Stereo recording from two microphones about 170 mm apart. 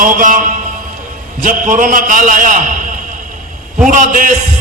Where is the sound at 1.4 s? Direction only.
50° right (ahead or behind).